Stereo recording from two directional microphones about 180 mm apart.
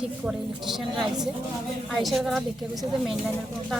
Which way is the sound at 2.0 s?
Centre (ahead or behind).